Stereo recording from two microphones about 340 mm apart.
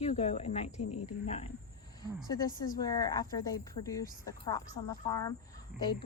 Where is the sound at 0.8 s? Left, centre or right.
Left.